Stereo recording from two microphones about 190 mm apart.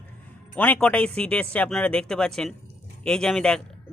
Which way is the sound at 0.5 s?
5° left (ahead or behind).